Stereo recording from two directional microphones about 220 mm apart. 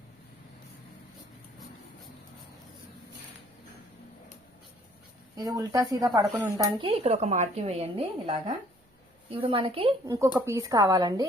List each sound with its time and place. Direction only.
5.4 s speech: 15° right (ahead or behind)
10.1 s speech: 15° right (ahead or behind)